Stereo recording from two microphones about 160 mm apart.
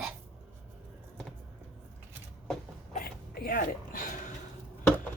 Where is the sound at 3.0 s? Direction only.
70° left (ahead or behind).